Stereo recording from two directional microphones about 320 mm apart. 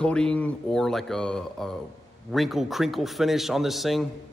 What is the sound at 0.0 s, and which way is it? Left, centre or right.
A man's voice, centre.